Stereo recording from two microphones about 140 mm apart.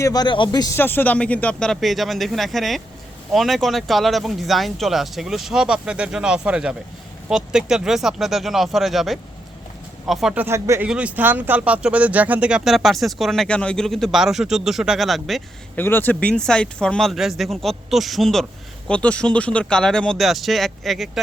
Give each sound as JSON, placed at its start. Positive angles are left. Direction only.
{"t": 0.0, "sound": "speech", "side_deg": 30}
{"t": 0.8, "sound": "speech", "side_deg": 15}
{"t": 10.3, "sound": "speech", "side_deg": -15}
{"t": 15.7, "sound": "speech", "side_deg": 15}